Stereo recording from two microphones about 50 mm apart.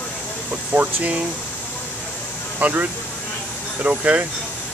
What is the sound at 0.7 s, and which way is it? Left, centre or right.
Speech, right.